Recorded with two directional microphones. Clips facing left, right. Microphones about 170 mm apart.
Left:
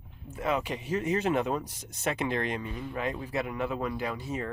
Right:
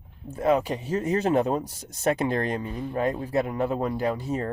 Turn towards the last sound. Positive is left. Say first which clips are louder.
# right 6 dB
turn(degrees=-40)  # may be behind; listen again after turning